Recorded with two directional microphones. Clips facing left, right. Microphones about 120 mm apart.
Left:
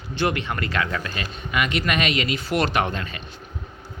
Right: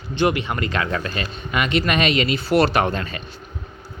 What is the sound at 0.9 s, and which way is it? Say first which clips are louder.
Speech: right 4 dB; 40° right (ahead or behind).